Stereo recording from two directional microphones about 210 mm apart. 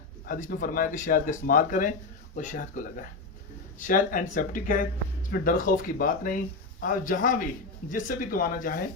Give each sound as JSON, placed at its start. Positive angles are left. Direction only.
{"t": 0.3, "sound": "speech", "side_deg": 40}